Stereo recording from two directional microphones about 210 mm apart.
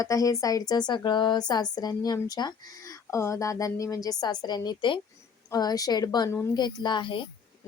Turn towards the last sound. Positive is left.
turn(degrees=25)  # may be behind; listen again after turning